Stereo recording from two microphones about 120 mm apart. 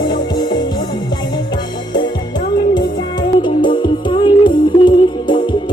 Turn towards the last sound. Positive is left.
turn(degrees=40)  # may be behind; listen again after turning